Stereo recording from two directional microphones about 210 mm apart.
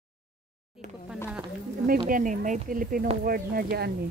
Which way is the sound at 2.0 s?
40° right (ahead or behind).